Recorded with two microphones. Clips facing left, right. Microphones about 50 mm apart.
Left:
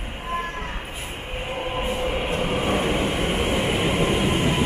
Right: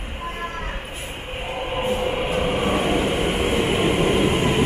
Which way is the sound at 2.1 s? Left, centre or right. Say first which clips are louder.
Right 2 dB; centre.